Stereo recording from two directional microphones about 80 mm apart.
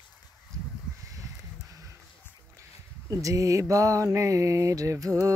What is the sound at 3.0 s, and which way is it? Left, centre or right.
Mantra, right.